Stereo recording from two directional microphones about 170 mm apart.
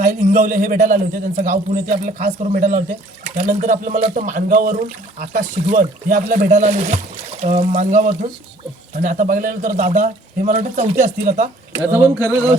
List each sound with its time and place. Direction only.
0.0 s a man's voice: 50° right (ahead or behind)
11.8 s speech: 10° right (ahead or behind)